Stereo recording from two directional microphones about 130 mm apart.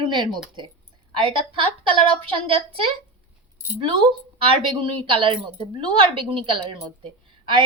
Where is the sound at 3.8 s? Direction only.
40° right (ahead or behind).